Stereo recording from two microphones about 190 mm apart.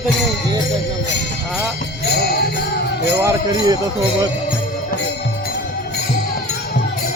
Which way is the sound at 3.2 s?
20° right (ahead or behind).